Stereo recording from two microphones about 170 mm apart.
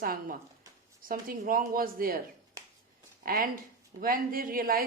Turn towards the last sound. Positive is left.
turn(degrees=-60)  # may be behind; listen again after turning